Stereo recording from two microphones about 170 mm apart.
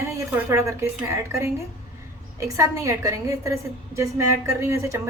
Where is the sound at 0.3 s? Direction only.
15° right (ahead or behind).